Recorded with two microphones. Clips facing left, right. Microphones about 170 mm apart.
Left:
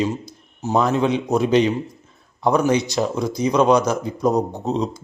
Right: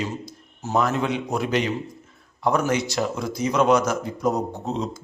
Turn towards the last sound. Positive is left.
turn(degrees=20)  # may be behind; listen again after turning